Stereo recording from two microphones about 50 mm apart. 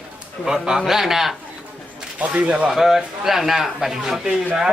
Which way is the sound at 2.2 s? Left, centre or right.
Right.